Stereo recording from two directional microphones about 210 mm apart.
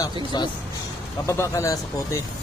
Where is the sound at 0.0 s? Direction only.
20° left (ahead or behind).